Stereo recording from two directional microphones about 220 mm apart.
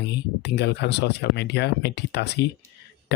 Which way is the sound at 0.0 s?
50° left (ahead or behind).